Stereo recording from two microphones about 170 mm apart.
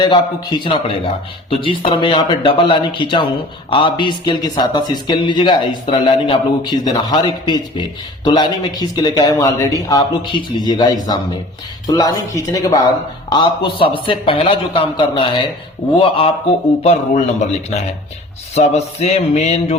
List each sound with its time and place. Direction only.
0.0 s speech: 25° left (ahead or behind)
1.9 s a man's voice: 30° left (ahead or behind)
16.8 s a man's voice: 40° left (ahead or behind)